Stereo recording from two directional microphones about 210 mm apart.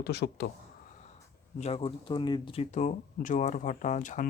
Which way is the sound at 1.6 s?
25° left (ahead or behind).